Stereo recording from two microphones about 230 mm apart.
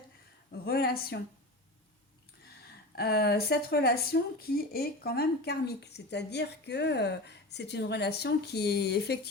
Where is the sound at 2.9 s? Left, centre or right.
Left.